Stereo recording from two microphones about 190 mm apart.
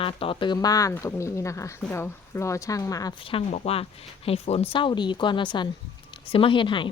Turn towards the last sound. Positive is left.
turn(degrees=25)  # may be behind; listen again after turning